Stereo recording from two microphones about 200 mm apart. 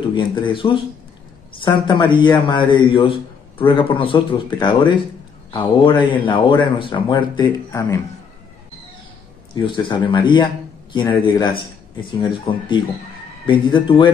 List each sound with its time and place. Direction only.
0.1 s a man's voice: 25° left (ahead or behind)
9.6 s a man's voice: 25° left (ahead or behind)
12.1 s a man's voice: 25° left (ahead or behind)